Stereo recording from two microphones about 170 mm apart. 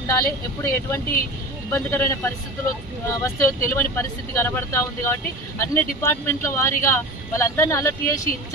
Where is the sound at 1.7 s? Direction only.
15° left (ahead or behind).